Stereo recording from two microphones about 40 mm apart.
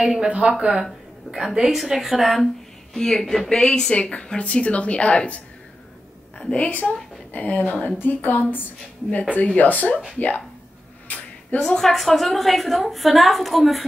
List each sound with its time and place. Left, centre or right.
0.0 s speech: right
1.7 s a woman's voice: centre
2.9 s speech: centre
3.4 s a woman's voice: left
3.9 s a woman's voice: left
6.5 s a woman's voice: left
9.3 s a woman's voice: left
11.1 s a sound: left
11.6 s a woman's voice: centre